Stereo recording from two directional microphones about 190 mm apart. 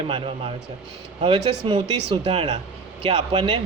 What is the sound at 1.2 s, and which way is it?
Speech, 30° right (ahead or behind).